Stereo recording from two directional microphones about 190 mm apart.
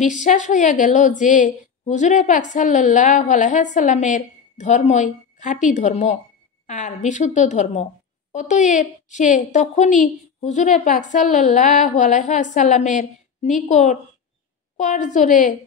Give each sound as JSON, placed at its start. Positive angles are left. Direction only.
{"t": 0.0, "sound": "a woman's voice", "side_deg": 40}